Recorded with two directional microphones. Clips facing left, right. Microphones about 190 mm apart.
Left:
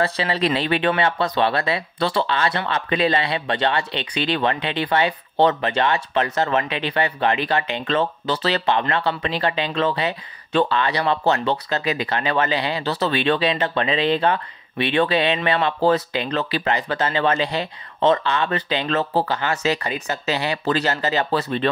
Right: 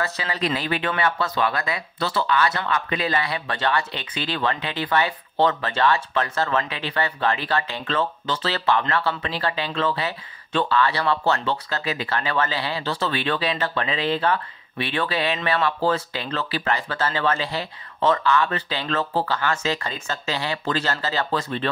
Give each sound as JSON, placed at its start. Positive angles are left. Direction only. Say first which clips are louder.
{"t": 0.2, "sound": "speech", "louder": "left 5 dB", "side_deg": 25}